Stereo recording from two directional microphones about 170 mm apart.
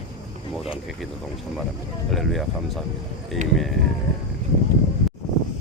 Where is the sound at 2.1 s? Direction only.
Centre (ahead or behind).